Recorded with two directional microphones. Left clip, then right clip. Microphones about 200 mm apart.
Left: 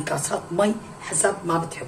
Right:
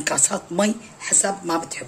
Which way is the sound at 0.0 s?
55° right (ahead or behind).